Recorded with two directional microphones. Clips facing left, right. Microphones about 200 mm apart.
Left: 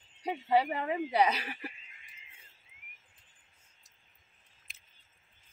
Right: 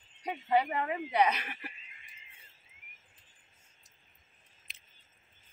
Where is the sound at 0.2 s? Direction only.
30° left (ahead or behind).